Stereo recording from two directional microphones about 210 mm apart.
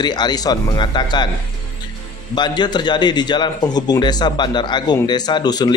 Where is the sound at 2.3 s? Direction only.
20° left (ahead or behind).